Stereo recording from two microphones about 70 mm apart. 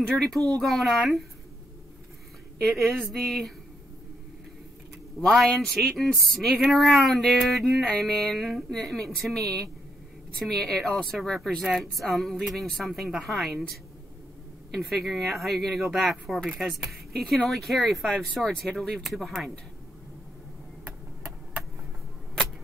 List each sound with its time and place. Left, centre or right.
0.2 s speech: centre
2.6 s speech: centre
5.2 s speech: centre
14.7 s speech: centre